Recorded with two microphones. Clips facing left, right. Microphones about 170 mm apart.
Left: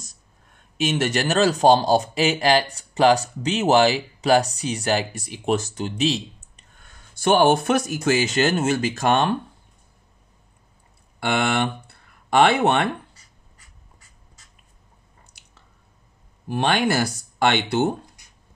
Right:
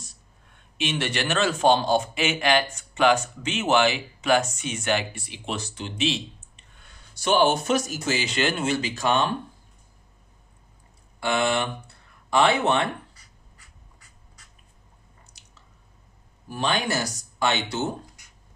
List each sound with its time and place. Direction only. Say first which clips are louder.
0.7 s speech: left 5 dB; 40° left (ahead or behind)
11.1 s speech: left 2 dB; 60° left (ahead or behind)
16.4 s speech: left 5 dB; 60° left (ahead or behind)